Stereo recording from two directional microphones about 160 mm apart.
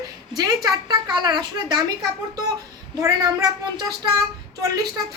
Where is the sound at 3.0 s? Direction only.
20° right (ahead or behind).